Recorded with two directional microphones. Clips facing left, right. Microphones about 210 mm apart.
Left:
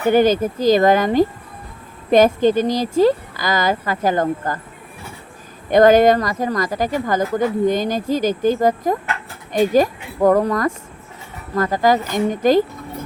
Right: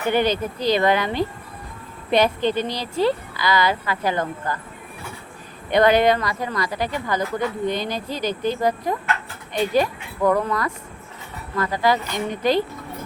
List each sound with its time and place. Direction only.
0.1 s speech: 45° left (ahead or behind)
5.7 s speech: 45° left (ahead or behind)